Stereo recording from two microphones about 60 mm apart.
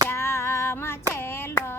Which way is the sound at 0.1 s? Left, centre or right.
Left.